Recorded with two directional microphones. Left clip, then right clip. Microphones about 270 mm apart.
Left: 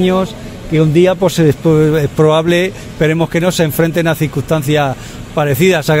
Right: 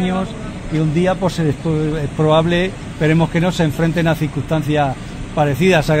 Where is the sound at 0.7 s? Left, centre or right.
Left.